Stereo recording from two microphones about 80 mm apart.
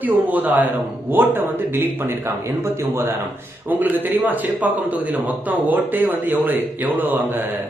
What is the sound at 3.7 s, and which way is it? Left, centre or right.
A man's voice, right.